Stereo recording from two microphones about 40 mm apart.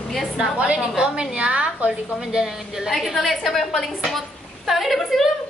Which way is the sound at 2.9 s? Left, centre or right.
Centre.